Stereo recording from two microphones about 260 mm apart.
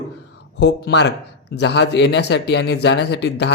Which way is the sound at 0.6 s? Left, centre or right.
Left.